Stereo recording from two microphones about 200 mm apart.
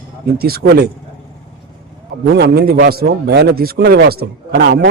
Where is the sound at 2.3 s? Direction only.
55° right (ahead or behind).